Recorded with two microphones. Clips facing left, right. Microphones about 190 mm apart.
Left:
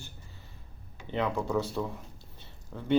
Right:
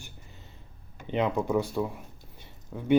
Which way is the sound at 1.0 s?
20° right (ahead or behind).